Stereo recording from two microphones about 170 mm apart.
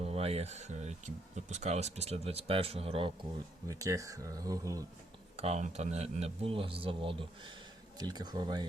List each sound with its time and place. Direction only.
0.0 s speech: 35° right (ahead or behind)
3.7 s speech: 20° right (ahead or behind)
5.4 s speech: 40° right (ahead or behind); by 8.6 s 25° right (ahead or behind)